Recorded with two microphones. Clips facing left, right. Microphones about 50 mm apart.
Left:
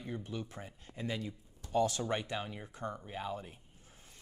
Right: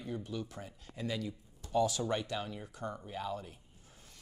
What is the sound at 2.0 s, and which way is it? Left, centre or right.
Speech, left.